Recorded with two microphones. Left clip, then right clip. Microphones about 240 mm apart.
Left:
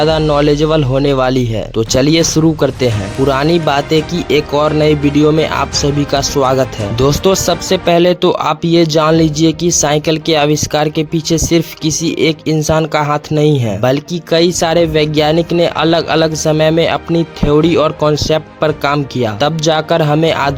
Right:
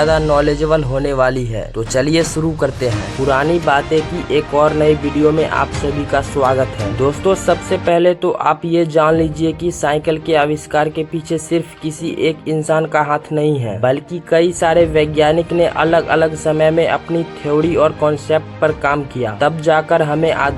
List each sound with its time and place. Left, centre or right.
0.0 s speech: left